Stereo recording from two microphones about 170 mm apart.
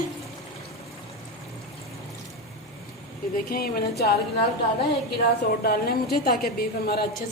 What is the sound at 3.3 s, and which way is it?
Speech, 60° left (ahead or behind).